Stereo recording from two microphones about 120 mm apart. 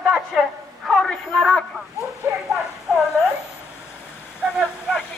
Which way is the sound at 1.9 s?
25° right (ahead or behind).